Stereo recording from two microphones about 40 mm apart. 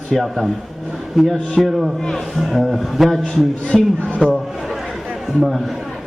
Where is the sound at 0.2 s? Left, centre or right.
Centre.